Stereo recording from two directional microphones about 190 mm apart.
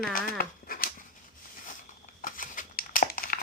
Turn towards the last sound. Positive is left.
turn(degrees=45)  # may be behind; listen again after turning